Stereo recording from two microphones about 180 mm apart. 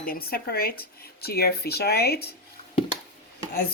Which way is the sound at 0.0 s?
55° left (ahead or behind).